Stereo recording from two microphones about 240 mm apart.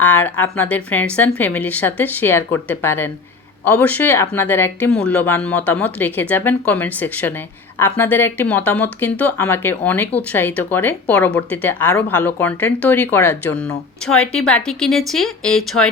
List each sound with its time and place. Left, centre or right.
0.0 s speech: centre